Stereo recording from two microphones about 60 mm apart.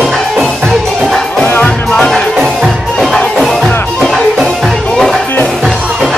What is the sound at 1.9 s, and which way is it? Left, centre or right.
Music, centre.